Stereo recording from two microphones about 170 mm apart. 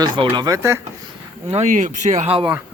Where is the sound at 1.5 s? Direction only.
45° right (ahead or behind).